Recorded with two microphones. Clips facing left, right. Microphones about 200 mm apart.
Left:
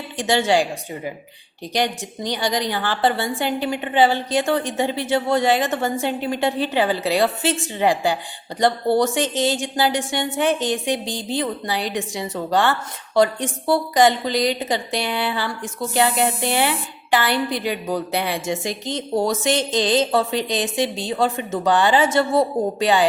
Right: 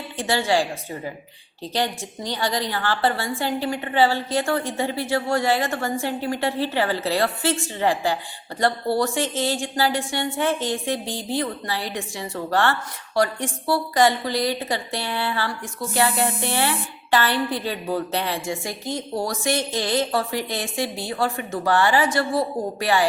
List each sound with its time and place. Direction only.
0.2 s a woman's voice: 20° left (ahead or behind)